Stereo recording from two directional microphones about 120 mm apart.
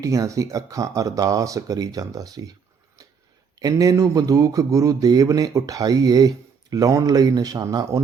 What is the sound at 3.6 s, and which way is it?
Speech, 30° right (ahead or behind).